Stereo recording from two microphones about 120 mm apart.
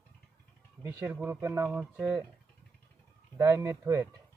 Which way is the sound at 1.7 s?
5° right (ahead or behind).